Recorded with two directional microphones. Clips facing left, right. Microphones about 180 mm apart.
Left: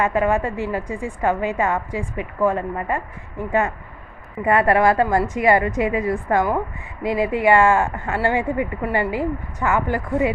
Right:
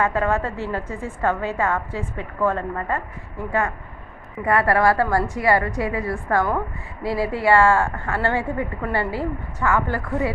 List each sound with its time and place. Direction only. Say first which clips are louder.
0.0 s speech: left 2 dB; 15° left (ahead or behind)
4.4 s a woman's voice: left 2 dB; 20° left (ahead or behind)